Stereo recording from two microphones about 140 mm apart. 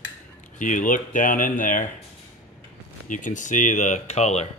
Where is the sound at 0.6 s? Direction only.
65° left (ahead or behind).